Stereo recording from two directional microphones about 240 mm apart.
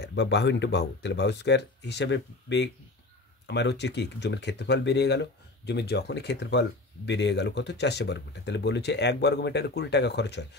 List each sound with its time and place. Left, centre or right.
0.0 s speech: left